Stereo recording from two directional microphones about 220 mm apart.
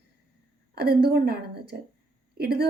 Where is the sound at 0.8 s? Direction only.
45° right (ahead or behind).